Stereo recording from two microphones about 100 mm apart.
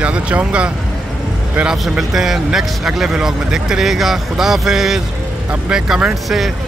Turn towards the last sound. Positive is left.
turn(degrees=-5)  # may be behind; listen again after turning